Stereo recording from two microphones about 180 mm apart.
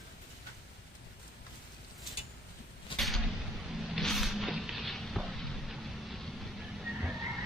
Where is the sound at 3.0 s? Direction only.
Centre (ahead or behind).